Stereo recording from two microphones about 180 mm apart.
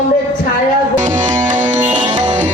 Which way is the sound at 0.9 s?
45° right (ahead or behind).